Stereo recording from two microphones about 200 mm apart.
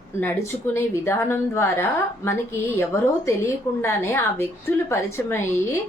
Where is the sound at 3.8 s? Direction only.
10° left (ahead or behind).